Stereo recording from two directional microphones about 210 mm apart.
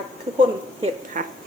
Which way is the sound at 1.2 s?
35° right (ahead or behind).